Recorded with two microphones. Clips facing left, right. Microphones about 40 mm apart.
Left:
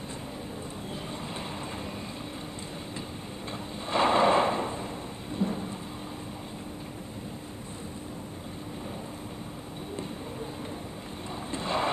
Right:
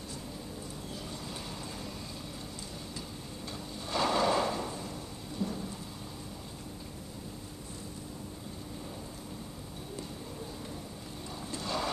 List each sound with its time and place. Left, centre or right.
3.9 s drawer open or close: left
5.3 s thunder: left
11.5 s boat: left